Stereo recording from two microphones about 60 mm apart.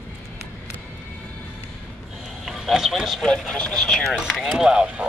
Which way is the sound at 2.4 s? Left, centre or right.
Centre.